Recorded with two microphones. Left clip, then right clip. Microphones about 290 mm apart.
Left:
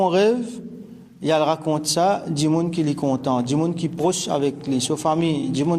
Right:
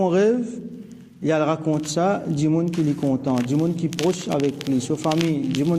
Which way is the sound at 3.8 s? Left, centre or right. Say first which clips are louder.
Even; left.